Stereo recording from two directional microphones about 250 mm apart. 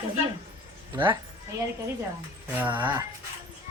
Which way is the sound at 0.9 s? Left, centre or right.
Centre.